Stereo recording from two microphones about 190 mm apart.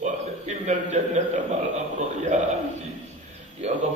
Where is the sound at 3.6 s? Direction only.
35° right (ahead or behind).